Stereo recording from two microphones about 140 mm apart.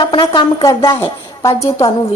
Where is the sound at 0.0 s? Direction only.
35° left (ahead or behind).